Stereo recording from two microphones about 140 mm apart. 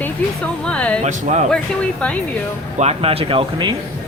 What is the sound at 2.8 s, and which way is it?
Speech, 45° right (ahead or behind).